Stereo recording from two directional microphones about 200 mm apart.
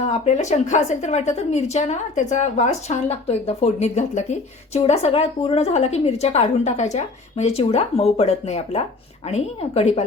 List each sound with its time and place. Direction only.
0.0 s a woman's voice: 35° left (ahead or behind)